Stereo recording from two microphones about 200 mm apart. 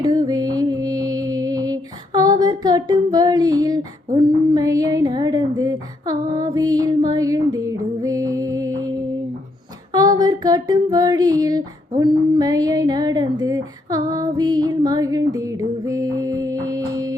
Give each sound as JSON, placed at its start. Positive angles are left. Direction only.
{"t": 0.0, "sound": "music", "side_deg": -20}
{"t": 9.9, "sound": "female singing", "side_deg": -20}
{"t": 11.9, "sound": "a sound", "side_deg": -20}